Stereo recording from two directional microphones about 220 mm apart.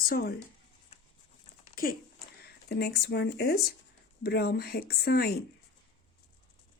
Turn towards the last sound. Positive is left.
turn(degrees=45)  # may be behind; listen again after turning